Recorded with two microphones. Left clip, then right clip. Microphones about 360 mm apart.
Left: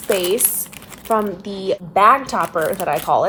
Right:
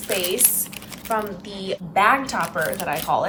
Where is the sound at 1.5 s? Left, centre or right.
Centre.